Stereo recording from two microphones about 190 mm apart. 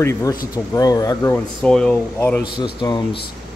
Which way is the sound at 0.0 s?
15° left (ahead or behind).